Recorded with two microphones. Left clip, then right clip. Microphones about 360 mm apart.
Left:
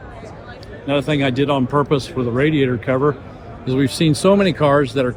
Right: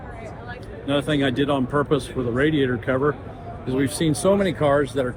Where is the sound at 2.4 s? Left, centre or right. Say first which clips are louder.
Left 4 dB; left.